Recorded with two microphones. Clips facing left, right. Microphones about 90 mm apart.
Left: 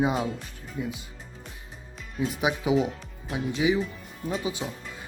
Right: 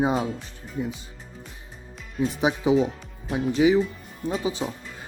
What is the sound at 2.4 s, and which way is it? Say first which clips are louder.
Speech: right 4 dB; 30° right (ahead or behind).